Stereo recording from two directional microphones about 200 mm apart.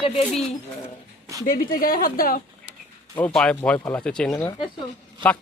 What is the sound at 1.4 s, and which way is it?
Speech, 45° left (ahead or behind).